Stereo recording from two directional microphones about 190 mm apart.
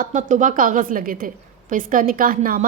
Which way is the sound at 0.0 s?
40° right (ahead or behind).